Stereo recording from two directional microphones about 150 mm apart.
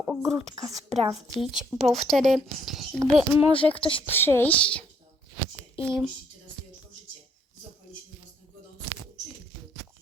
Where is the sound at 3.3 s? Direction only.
35° left (ahead or behind).